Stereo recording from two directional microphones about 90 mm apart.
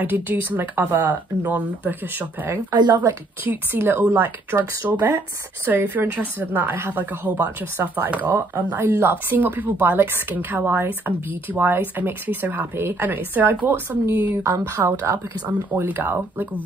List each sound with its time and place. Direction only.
0.0 s a woman's voice: 20° right (ahead or behind)
2.7 s speech: 55° right (ahead or behind)
3.4 s a woman's voice: 25° right (ahead or behind)